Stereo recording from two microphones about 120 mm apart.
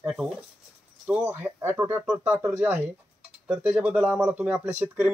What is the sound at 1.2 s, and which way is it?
Speech, 20° right (ahead or behind).